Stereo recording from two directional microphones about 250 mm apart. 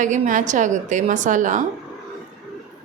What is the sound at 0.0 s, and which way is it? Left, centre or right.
A woman's voice, right.